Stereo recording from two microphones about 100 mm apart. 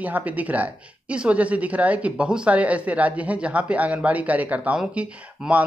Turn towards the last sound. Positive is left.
turn(degrees=-15)  # may be behind; listen again after turning